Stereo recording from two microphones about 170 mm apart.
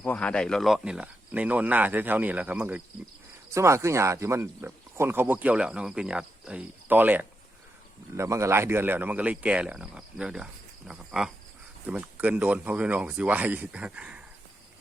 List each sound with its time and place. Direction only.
0.0 s speech: 5° left (ahead or behind)